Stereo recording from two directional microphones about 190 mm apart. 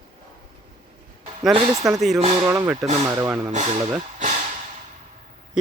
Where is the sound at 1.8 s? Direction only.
Centre (ahead or behind).